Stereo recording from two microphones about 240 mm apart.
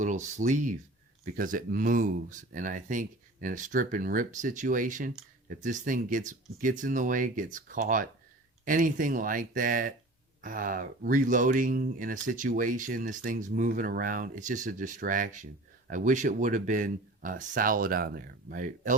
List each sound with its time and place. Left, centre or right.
0.0 s speech: right